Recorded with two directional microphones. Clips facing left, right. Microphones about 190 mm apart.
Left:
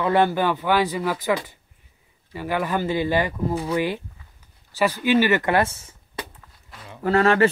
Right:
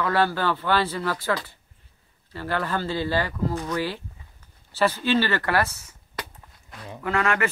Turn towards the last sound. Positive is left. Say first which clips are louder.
# left 7 dB
turn(degrees=35)  # may be behind; listen again after turning